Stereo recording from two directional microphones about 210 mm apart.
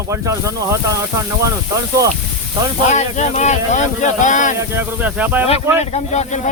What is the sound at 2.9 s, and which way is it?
Speech, 35° left (ahead or behind).